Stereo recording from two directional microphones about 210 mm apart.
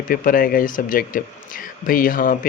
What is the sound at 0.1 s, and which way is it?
Speech, 40° left (ahead or behind).